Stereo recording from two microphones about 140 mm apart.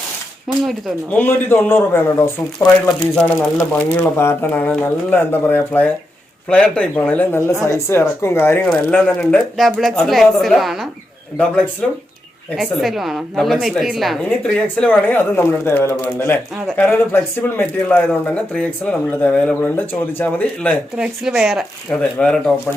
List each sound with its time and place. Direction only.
0.4 s a woman's voice: centre (ahead or behind)
1.1 s a woman's voice: 15° left (ahead or behind)
12.5 s a woman's voice: centre (ahead or behind)
20.9 s a woman's voice: 5° right (ahead or behind)